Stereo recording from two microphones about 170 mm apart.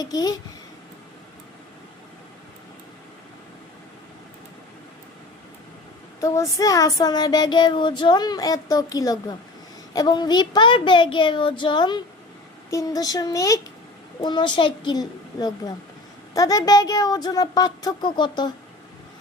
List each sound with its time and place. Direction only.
0.0 s child singing: 20° left (ahead or behind)
6.1 s child singing: 20° left (ahead or behind)